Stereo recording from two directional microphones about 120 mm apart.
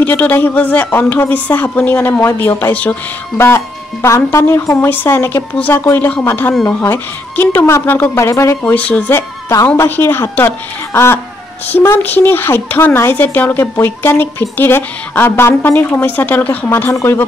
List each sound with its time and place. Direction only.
0.0 s speech: 15° left (ahead or behind)